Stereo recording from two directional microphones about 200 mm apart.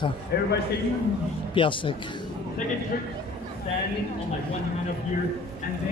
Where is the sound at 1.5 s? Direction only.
25° left (ahead or behind).